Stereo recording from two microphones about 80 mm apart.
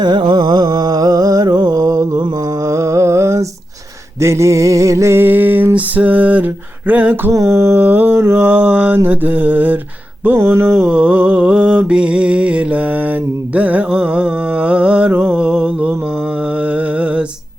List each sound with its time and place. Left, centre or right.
0.0 s music: right
2.6 s a sound: right
7.3 s a sound: right
10.8 s music: centre
15.4 s mantra: centre
16.6 s music: centre